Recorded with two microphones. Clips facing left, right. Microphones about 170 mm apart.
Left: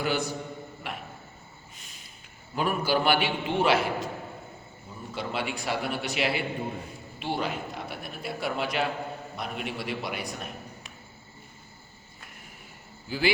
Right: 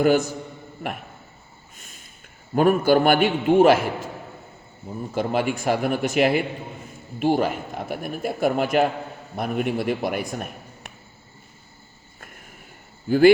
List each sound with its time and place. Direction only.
0.0 s a man's voice: 45° right (ahead or behind)
2.6 s a man's voice: 50° right (ahead or behind)
5.1 s a man's voice: 50° right (ahead or behind)
13.1 s speech: 50° right (ahead or behind)